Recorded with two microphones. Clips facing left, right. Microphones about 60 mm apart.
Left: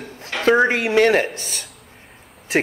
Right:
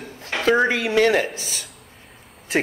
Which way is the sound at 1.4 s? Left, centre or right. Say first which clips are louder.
Left 1 dB; left.